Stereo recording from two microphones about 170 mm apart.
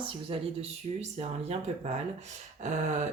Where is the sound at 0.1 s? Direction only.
35° right (ahead or behind).